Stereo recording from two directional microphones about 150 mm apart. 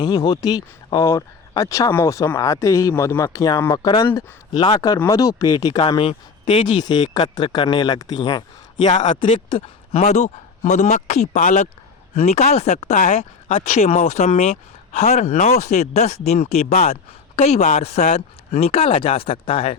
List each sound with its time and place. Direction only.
0.0 s speech: 30° left (ahead or behind)
8.9 s speech: 55° left (ahead or behind)
9.2 s speech: 40° left (ahead or behind)